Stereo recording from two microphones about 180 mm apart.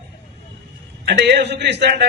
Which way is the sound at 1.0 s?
65° right (ahead or behind).